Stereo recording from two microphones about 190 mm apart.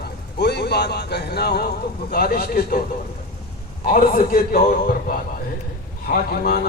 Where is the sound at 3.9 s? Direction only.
50° left (ahead or behind).